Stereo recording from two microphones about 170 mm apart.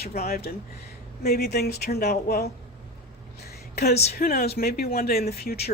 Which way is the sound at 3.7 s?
65° left (ahead or behind).